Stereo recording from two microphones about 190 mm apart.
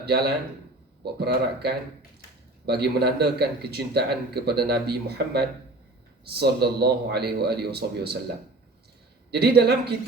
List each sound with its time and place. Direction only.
0.0 s a man's voice: 60° right (ahead or behind)
9.3 s a man's voice: 55° right (ahead or behind)